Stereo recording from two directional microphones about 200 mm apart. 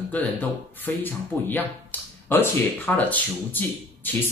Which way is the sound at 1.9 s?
10° left (ahead or behind).